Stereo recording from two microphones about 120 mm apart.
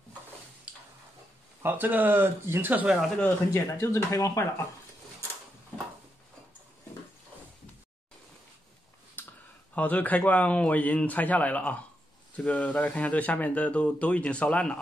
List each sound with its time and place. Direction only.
1.6 s speech: 15° right (ahead or behind)
3.5 s speech: 25° left (ahead or behind)
9.2 s a sound: 15° left (ahead or behind)
9.8 s speech: 15° left (ahead or behind)